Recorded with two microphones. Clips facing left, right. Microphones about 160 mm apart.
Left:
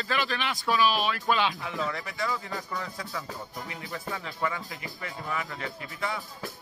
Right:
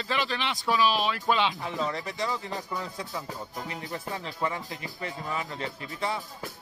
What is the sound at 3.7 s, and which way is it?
Speech, 35° right (ahead or behind).